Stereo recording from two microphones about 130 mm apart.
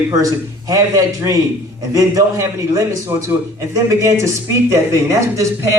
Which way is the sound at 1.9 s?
25° right (ahead or behind).